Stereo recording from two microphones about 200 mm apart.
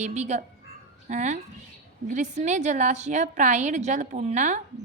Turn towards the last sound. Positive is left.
turn(degrees=-35)  # may be behind; listen again after turning